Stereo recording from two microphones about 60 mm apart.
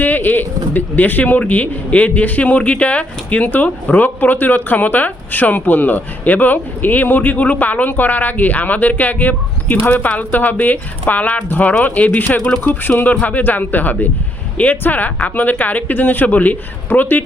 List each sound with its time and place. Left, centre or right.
0.0 s speech: left